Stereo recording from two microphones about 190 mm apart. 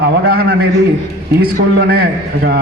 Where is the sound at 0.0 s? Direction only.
55° right (ahead or behind).